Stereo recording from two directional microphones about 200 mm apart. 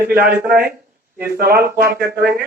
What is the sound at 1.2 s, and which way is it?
A man's voice, 50° right (ahead or behind).